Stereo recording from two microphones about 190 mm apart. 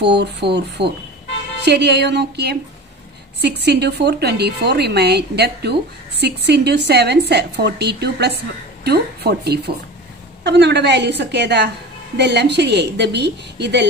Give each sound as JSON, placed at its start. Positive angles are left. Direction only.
{"t": 0.0, "sound": "a woman's voice", "side_deg": -65}